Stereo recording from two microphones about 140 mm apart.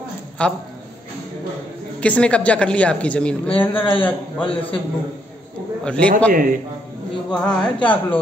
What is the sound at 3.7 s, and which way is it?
Speech, 40° left (ahead or behind).